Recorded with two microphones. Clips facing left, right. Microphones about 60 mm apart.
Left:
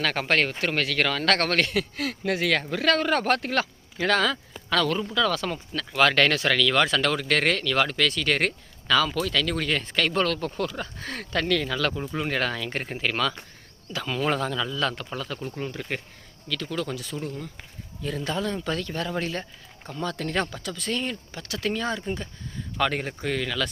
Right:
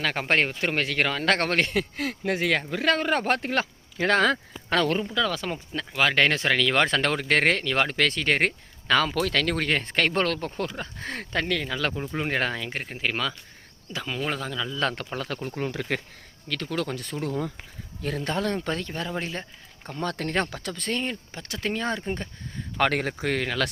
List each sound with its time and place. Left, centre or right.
0.0 s speech: centre
0.3 s a man's voice: right
5.0 s a man's voice: centre
12.7 s speech: centre
13.0 s speech: centre
14.8 s speech: right
16.5 s speech: right
18.7 s a man's voice: right
19.9 s speech: right
21.0 s speech: right
22.8 s speech: right
23.2 s speech: right